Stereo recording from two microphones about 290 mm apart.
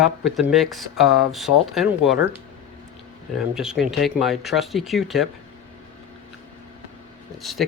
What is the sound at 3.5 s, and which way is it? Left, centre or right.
Speech, centre.